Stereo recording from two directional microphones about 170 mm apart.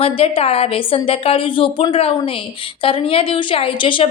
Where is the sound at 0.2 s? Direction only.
35° left (ahead or behind).